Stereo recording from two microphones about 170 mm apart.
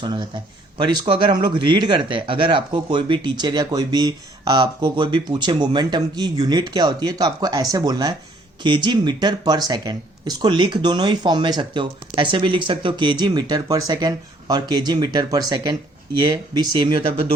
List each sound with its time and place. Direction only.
0.0 s speech: 25° right (ahead or behind)